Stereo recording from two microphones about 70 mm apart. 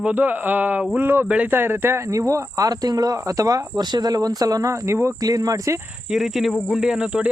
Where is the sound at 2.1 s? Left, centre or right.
Right.